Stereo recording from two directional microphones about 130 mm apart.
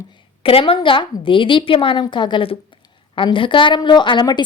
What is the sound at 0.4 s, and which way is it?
A woman's voice, 45° left (ahead or behind).